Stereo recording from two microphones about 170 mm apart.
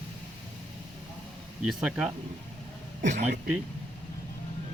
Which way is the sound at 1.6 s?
5° right (ahead or behind).